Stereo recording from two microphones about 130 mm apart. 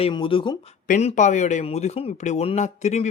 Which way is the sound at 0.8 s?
85° left.